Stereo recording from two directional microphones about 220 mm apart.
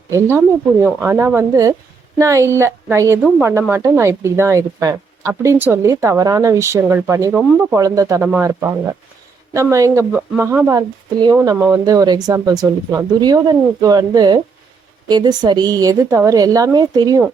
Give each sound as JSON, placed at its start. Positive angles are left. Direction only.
{"t": 0.1, "sound": "speech", "side_deg": -10}